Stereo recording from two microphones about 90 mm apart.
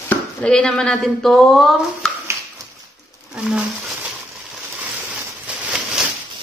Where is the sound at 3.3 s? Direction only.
10° right (ahead or behind).